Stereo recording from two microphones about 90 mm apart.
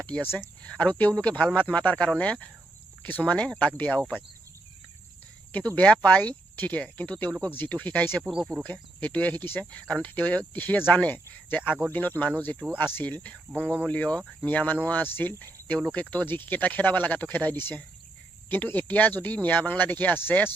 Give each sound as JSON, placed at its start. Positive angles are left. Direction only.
{"t": 0.0, "sound": "speech", "side_deg": 15}
{"t": 5.5, "sound": "speech", "side_deg": 15}
{"t": 8.2, "sound": "speech", "side_deg": -10}
{"t": 8.6, "sound": "speech", "side_deg": 15}
{"t": 13.5, "sound": "speech", "side_deg": -20}
{"t": 13.8, "sound": "speech", "side_deg": 15}